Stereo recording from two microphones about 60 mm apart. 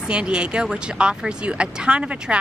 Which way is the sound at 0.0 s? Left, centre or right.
Centre.